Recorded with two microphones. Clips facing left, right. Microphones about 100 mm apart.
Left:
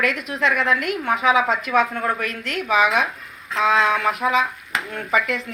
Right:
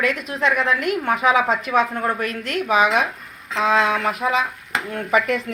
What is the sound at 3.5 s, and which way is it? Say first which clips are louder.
Speech: even; 30° right (ahead or behind).